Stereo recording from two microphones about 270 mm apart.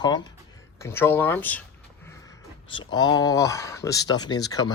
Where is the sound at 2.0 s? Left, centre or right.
Centre.